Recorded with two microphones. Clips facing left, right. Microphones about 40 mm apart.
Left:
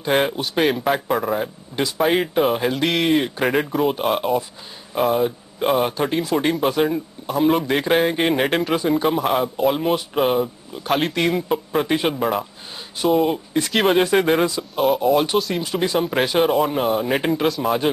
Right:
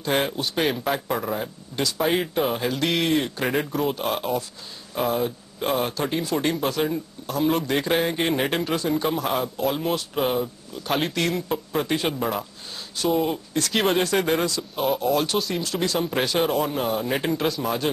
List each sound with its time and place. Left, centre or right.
0.0 s speech: centre
2.0 s speech: centre
6.6 s speech: centre
8.7 s speech: centre
10.9 s speech: centre
11.1 s speech: centre
13.5 s speech: left
15.3 s speech: centre
15.6 s speech: centre